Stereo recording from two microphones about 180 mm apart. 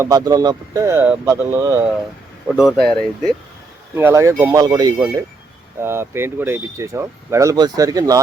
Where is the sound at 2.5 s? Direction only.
5° right (ahead or behind).